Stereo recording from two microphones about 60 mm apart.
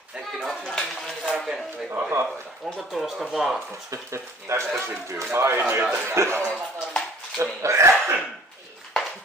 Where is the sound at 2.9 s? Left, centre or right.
Centre.